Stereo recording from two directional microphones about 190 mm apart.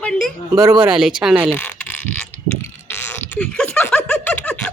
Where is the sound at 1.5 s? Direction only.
10° left (ahead or behind).